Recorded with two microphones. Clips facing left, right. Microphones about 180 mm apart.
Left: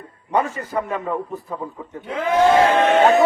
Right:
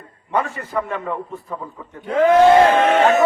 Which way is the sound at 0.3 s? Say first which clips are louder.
Left 1 dB; 20° left (ahead or behind).